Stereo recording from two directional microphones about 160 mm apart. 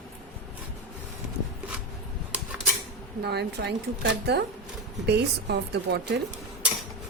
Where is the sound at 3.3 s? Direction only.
90° right.